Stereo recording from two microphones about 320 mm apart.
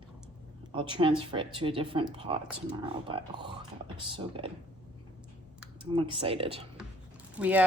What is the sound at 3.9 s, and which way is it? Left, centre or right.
Speech, centre.